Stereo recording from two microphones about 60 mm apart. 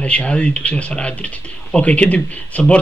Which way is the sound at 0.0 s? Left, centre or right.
Left.